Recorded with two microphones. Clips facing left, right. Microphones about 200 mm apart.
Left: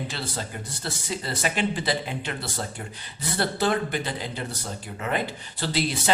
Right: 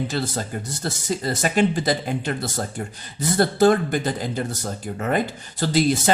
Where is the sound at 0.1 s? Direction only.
45° right (ahead or behind).